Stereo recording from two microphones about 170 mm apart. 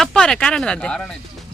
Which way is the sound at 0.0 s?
5° left (ahead or behind).